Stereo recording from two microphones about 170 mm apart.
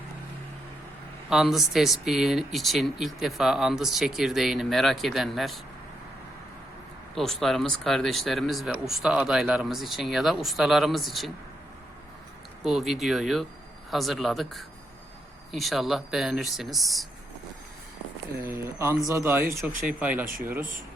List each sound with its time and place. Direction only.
1.3 s speech: centre (ahead or behind)
7.2 s speech: centre (ahead or behind)
12.6 s speech: centre (ahead or behind)
18.4 s speech: 15° right (ahead or behind)